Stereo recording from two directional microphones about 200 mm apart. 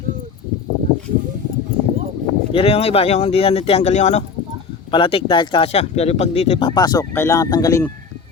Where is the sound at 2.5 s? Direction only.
30° left (ahead or behind).